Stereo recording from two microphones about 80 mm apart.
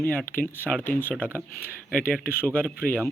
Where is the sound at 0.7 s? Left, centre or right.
Left.